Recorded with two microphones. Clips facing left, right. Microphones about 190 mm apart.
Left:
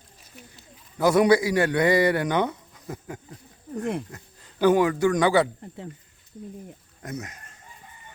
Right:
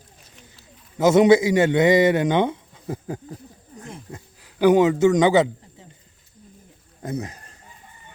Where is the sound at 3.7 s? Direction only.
65° left (ahead or behind).